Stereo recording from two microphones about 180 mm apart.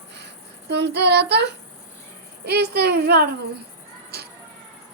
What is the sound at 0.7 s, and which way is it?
Speech, 70° right (ahead or behind).